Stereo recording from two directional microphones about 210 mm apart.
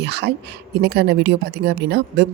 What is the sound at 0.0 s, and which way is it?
Speech, 55° right (ahead or behind).